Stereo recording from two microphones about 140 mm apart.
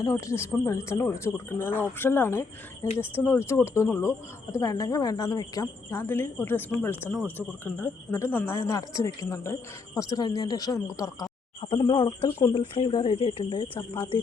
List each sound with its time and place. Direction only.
0.0 s a woman's voice: 20° left (ahead or behind)
11.6 s speech: 35° left (ahead or behind)